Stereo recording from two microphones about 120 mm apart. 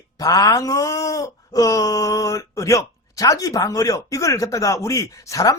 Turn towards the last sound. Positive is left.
turn(degrees=25)  # may be behind; listen again after turning